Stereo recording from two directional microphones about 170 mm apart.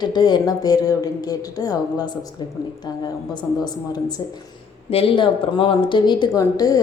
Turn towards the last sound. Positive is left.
turn(degrees=20)  # may be behind; listen again after turning